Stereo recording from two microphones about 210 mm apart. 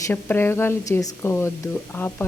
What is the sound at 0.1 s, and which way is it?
Speech, 10° left (ahead or behind).